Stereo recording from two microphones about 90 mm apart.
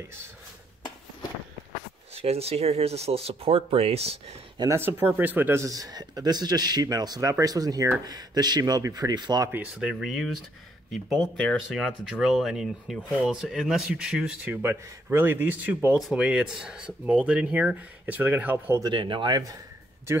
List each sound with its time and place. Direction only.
2.1 s speech: 90° right
4.6 s speech: 25° right (ahead or behind)
5.6 s speech: 40° right (ahead or behind)
9.5 s speech: 15° right (ahead or behind)
9.9 s speech: centre (ahead or behind)
11.5 s speech: centre (ahead or behind)
14.4 s speech: 20° right (ahead or behind)
16.0 s speech: 5° right (ahead or behind)
18.9 s speech: 65° right (ahead or behind)